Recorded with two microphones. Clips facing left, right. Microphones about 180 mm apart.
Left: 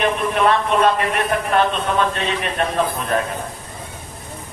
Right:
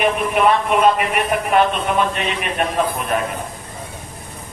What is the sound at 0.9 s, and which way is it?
Speech, 10° right (ahead or behind).